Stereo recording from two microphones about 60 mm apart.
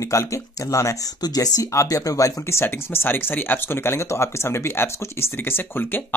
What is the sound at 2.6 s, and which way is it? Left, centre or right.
Speech, left.